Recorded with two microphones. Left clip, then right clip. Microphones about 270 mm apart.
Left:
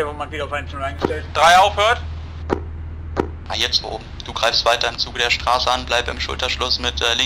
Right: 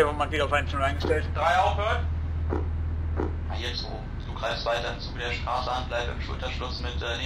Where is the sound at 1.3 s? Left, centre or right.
Left.